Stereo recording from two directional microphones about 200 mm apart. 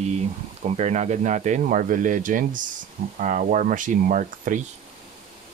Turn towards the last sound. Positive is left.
turn(degrees=-40)  # may be behind; listen again after turning